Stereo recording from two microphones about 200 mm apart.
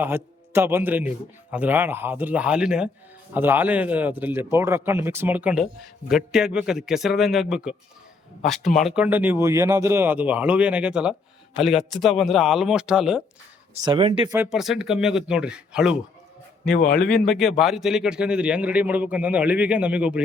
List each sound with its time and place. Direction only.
0.0 s a man's voice: 10° right (ahead or behind)
13.8 s speech: 25° right (ahead or behind)
14.3 s a man's voice: centre (ahead or behind)
17.0 s a man's voice: 5° left (ahead or behind)